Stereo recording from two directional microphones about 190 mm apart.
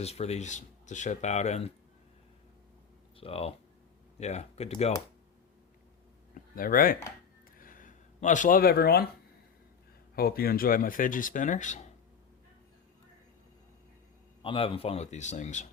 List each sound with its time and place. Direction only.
0.0 s speech: 35° left (ahead or behind)
3.2 s speech: 30° left (ahead or behind)
6.3 s speech: 50° left (ahead or behind)
7.6 s a sound: 45° left (ahead or behind)
10.2 s speech: 50° left (ahead or behind)
14.4 s speech: 30° left (ahead or behind)